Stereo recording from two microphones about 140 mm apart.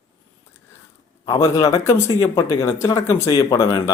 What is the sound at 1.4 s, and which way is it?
Speech, 25° left (ahead or behind).